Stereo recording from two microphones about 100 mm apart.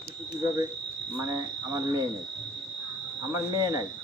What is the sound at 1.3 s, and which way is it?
Speech, 35° right (ahead or behind).